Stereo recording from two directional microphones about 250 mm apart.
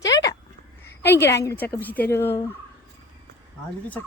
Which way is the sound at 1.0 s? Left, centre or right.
Centre.